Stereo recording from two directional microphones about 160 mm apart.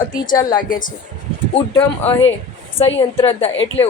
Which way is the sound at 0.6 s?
55° left (ahead or behind).